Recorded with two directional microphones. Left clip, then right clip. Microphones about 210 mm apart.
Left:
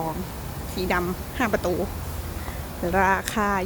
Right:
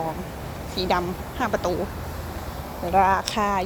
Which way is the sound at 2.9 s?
25° left (ahead or behind).